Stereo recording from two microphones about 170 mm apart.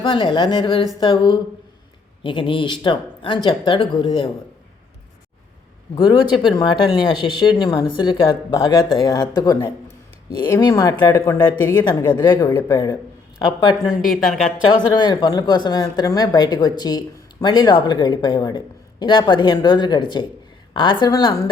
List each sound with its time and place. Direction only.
0.0 s speech: 30° left (ahead or behind)
5.9 s speech: 25° left (ahead or behind)